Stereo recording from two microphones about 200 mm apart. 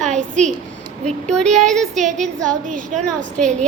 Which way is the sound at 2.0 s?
35° right (ahead or behind).